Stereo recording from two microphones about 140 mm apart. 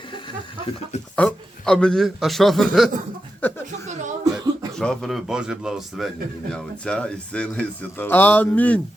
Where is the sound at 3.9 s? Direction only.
60° right (ahead or behind).